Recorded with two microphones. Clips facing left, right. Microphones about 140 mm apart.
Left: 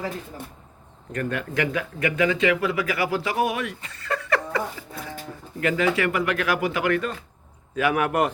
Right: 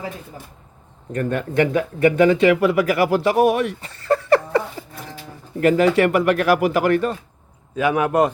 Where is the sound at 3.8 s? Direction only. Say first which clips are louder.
Right 9 dB; 35° right (ahead or behind).